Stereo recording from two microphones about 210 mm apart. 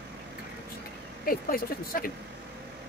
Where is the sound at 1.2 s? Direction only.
45° left (ahead or behind).